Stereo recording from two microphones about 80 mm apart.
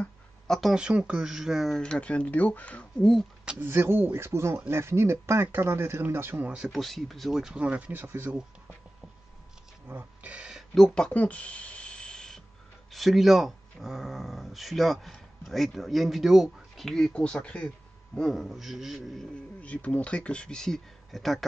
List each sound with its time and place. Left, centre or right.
0.5 s speech: centre
1.8 s speech: centre
3.0 s speech: centre
3.6 s speech: right
6.5 s speech: centre
6.8 s speech: centre; by 8.3 s right
9.8 s speech: centre
10.5 s a sound: centre
11.1 s a sound: centre
12.9 s speech: centre
19.6 s speech: centre